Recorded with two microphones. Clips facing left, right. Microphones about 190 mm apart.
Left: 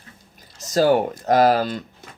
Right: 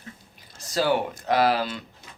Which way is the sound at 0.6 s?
45° left (ahead or behind).